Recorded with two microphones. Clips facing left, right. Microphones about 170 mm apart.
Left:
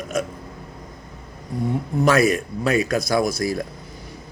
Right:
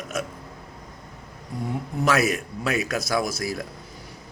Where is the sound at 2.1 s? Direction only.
5° right (ahead or behind).